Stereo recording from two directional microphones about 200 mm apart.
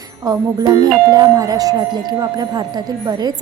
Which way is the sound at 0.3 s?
20° right (ahead or behind).